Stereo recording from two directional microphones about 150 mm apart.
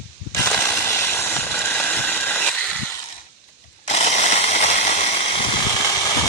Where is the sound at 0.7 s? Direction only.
15° left (ahead or behind).